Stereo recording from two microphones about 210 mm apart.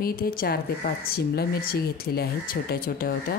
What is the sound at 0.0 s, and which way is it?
Speech, 45° left (ahead or behind).